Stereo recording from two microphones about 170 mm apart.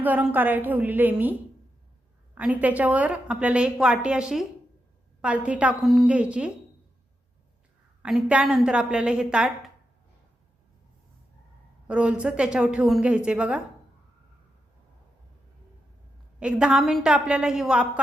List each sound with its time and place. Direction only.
0.0 s a woman's voice: 10° right (ahead or behind)
8.0 s a woman's voice: 5° right (ahead or behind)
11.9 s a woman's voice: 5° right (ahead or behind)
16.4 s a woman's voice: 5° right (ahead or behind)